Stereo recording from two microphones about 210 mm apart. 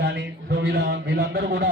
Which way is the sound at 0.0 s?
55° right (ahead or behind).